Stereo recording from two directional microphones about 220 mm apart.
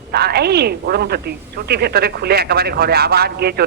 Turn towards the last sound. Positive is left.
turn(degrees=-45)  # may be behind; listen again after turning